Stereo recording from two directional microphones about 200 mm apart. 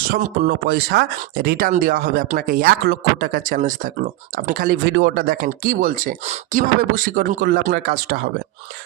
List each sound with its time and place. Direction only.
0.1 s speech: 40° right (ahead or behind)
0.7 s speech: 50° right (ahead or behind)